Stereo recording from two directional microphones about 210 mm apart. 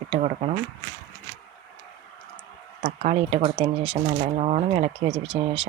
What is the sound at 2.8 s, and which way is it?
Speech, 30° right (ahead or behind).